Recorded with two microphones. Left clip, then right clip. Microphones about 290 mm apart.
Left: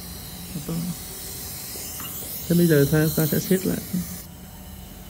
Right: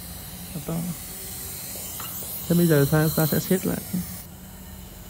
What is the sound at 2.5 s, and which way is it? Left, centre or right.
Speech, centre.